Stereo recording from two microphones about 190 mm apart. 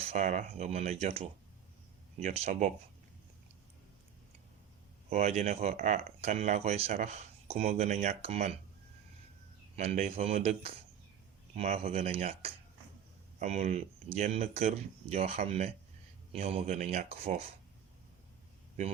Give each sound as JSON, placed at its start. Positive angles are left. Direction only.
{"t": 0.1, "sound": "speech", "side_deg": -40}
{"t": 5.0, "sound": "speech", "side_deg": -35}
{"t": 9.7, "sound": "speech", "side_deg": -35}